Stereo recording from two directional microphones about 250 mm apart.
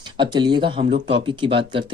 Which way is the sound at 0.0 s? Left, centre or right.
Centre.